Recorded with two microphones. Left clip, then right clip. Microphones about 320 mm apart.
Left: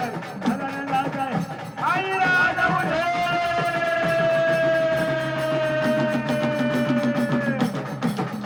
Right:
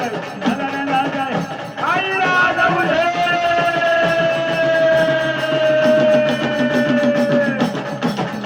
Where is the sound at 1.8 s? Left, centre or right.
Centre.